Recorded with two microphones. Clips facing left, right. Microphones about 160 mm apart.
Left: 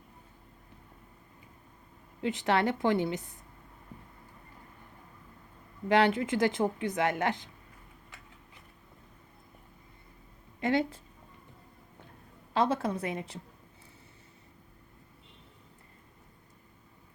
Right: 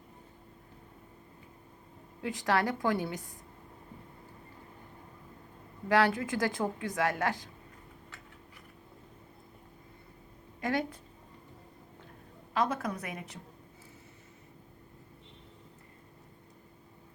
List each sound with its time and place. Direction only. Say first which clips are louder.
2.2 s speech: left 2 dB; 25° left (ahead or behind)
5.9 s speech: left 2 dB; 20° left (ahead or behind)
10.6 s a woman's voice: left 4 dB; 25° left (ahead or behind)
12.5 s speech: left 3 dB; 30° left (ahead or behind)